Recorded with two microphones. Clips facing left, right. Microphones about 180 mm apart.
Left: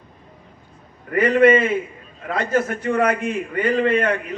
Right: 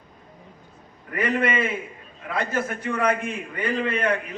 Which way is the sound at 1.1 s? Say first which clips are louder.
Left 9 dB; 50° left (ahead or behind).